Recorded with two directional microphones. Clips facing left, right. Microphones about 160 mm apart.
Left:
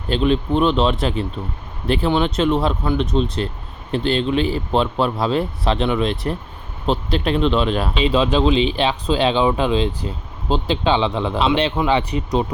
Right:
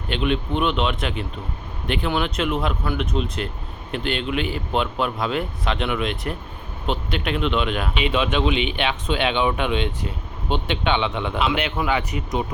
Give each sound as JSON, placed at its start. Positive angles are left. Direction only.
{"t": 0.1, "sound": "speech", "side_deg": 35}